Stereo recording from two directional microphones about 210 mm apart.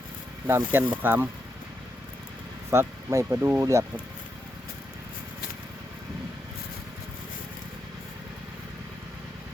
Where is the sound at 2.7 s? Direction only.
10° right (ahead or behind).